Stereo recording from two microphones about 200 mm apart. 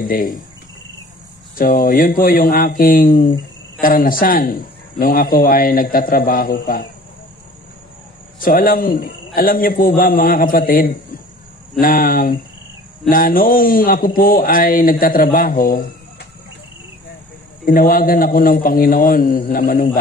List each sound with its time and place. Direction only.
0.0 s speech: 45° left (ahead or behind)
1.6 s speech: 45° left (ahead or behind)
8.4 s speech: 45° left (ahead or behind)
17.6 s speech: 45° left (ahead or behind)